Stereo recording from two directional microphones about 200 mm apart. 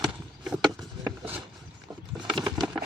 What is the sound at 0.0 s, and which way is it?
Horse, 5° right (ahead or behind).